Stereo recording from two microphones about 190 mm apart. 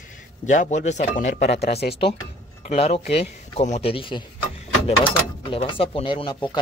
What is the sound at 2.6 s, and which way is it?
Speech, 35° left (ahead or behind).